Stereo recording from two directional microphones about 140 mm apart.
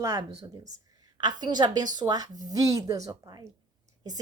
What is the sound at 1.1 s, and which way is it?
A woman's voice, 30° right (ahead or behind).